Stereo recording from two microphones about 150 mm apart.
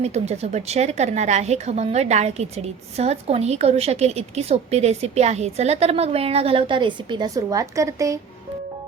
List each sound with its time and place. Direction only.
0.0 s a woman's voice: 45° right (ahead or behind); by 8.2 s 20° right (ahead or behind)